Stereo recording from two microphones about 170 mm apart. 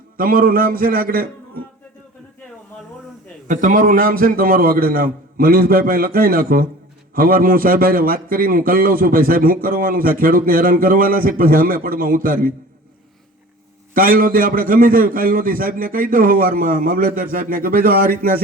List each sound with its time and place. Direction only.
0.2 s a man's voice: 55° right (ahead or behind)
3.4 s a man's voice: 50° right (ahead or behind)
13.9 s a man's voice: 55° right (ahead or behind)